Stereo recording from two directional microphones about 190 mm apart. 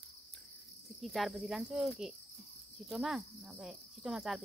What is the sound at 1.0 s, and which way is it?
Insect, centre (ahead or behind).